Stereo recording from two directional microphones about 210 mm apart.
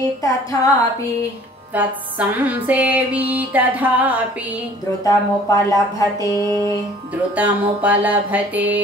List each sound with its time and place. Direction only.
0.2 s speech: 15° left (ahead or behind)
1.8 s music: 5° right (ahead or behind)
5.0 s speech: 15° left (ahead or behind)
7.3 s music: 5° right (ahead or behind)